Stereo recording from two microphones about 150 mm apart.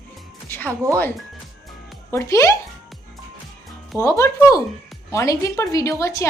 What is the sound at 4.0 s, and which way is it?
A woman's voice, 20° left (ahead or behind).